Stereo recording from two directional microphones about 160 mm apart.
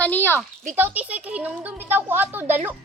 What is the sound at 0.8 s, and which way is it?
A woman's voice, 10° right (ahead or behind).